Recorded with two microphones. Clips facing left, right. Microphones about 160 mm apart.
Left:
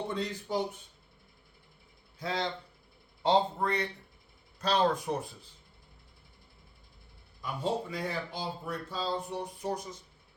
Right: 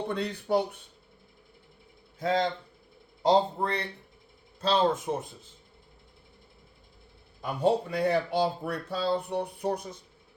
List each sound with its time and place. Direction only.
0.1 s speech: 60° right (ahead or behind)
2.1 s speech: 50° right (ahead or behind)
3.2 s a man's voice: 35° right (ahead or behind)
7.4 s speech: 60° right (ahead or behind)